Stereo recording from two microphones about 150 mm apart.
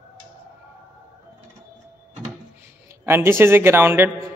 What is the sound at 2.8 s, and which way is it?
Speech, 15° right (ahead or behind).